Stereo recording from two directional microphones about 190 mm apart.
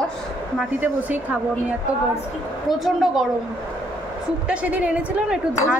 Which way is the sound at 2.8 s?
Centre (ahead or behind).